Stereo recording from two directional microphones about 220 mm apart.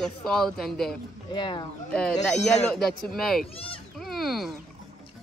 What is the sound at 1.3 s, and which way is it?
Speech, 20° left (ahead or behind).